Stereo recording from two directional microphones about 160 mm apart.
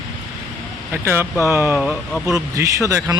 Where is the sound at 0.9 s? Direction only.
15° right (ahead or behind).